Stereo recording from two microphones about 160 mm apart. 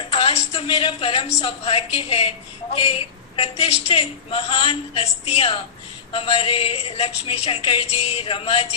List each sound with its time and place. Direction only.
0.1 s a woman's voice: 40° left (ahead or behind)